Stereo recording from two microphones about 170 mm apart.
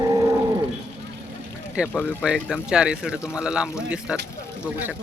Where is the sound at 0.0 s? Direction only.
20° right (ahead or behind).